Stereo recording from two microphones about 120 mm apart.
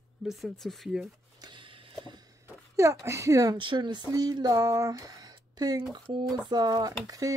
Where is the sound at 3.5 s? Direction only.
40° right (ahead or behind).